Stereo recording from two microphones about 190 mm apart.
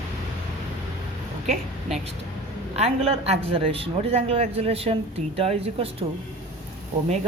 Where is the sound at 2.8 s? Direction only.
30° right (ahead or behind).